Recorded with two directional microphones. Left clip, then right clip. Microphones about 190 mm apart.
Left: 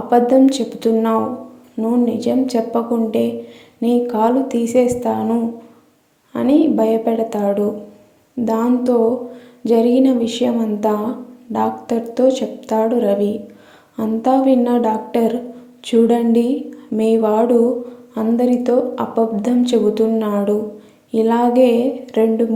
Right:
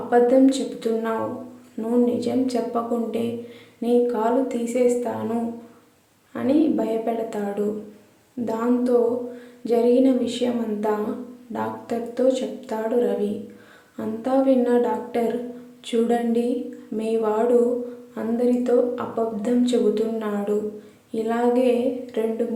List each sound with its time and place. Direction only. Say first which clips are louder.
0.1 s a woman's voice: left 4 dB; 30° left (ahead or behind)
6.3 s a woman's voice: left 6 dB; 30° left (ahead or behind)